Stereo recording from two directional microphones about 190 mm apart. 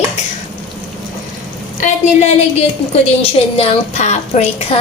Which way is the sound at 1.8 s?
35° left (ahead or behind).